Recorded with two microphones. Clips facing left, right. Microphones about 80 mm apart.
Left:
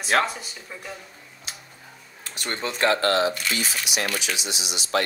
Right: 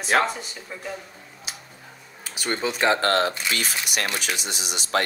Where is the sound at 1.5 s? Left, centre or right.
Centre.